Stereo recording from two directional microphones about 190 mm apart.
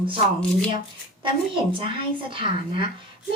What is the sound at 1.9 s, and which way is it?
Speech, 25° right (ahead or behind).